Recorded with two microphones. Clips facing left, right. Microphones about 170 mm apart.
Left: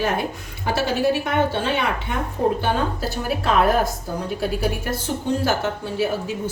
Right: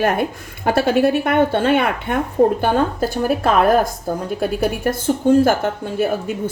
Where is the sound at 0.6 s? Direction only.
55° right (ahead or behind).